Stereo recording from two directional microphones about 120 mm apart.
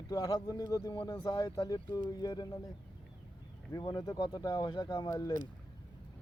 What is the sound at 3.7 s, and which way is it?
Speech, 30° left (ahead or behind).